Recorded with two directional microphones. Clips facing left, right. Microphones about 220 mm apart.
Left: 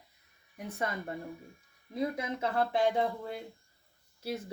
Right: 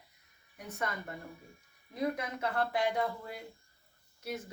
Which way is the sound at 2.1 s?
30° left (ahead or behind).